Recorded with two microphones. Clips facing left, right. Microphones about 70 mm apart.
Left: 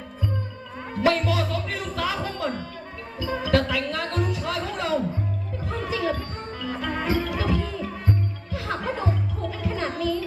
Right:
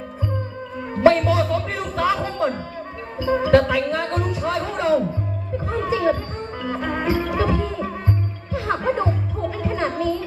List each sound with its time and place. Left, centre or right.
0.9 s speech: right
5.6 s chatter: right
6.6 s music: right